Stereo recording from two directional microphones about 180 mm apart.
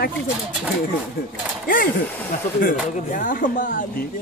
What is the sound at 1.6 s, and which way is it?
Speech, 50° left (ahead or behind).